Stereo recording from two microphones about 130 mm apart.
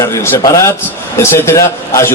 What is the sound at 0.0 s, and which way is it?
A man's voice, 20° left (ahead or behind).